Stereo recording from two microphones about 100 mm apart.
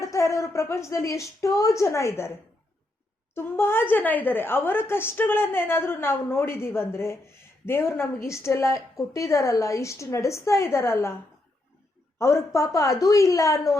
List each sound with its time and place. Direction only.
0.0 s a woman's voice: 30° left (ahead or behind)
3.3 s a woman's voice: 25° left (ahead or behind)
12.2 s a woman's voice: 30° left (ahead or behind)